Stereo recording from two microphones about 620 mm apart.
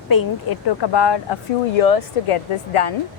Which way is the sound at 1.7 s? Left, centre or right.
Left.